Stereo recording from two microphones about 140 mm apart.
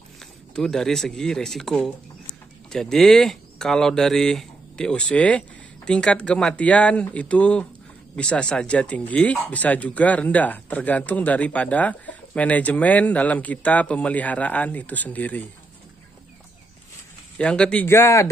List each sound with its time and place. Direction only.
0.2 s speech: 5° left (ahead or behind)
17.4 s speech: 10° left (ahead or behind)